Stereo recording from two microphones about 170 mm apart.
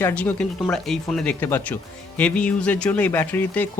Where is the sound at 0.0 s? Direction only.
10° left (ahead or behind).